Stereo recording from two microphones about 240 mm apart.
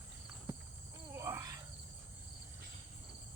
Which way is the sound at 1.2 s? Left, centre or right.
Centre.